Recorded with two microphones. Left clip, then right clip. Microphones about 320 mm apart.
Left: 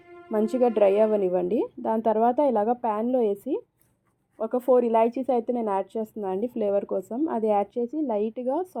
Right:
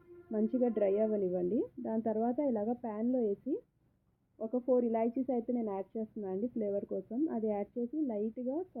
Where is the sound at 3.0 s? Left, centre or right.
Left.